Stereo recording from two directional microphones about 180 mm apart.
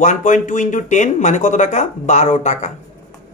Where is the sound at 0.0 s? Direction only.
45° left (ahead or behind).